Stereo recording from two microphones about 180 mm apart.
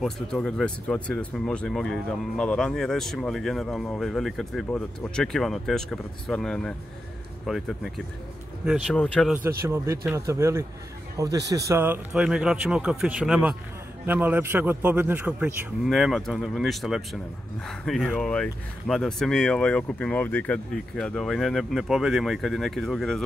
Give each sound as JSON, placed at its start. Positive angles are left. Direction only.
{"t": 0.0, "sound": "speech", "side_deg": 5}
{"t": 8.9, "sound": "speech", "side_deg": 5}
{"t": 9.6, "sound": "a man's voice", "side_deg": -15}